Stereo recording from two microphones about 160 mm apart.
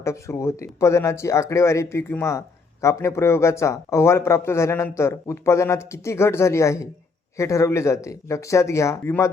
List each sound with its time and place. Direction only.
0.0 s speech: 20° left (ahead or behind)